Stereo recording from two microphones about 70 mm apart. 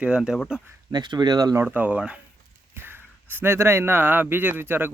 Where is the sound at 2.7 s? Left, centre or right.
Right.